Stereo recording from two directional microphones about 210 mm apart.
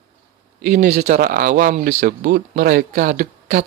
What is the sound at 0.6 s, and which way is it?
Speech, 45° right (ahead or behind).